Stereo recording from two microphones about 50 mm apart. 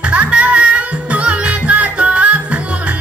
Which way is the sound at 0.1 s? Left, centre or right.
Right.